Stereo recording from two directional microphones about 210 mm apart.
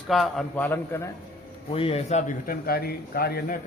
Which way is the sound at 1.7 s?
25° left (ahead or behind).